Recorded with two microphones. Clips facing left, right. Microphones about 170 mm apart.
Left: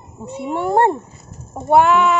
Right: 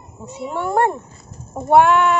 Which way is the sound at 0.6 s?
30° left (ahead or behind).